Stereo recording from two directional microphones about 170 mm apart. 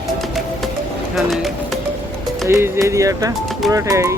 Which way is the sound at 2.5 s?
15° right (ahead or behind).